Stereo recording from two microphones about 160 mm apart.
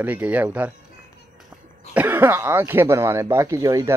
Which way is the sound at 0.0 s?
10° right (ahead or behind).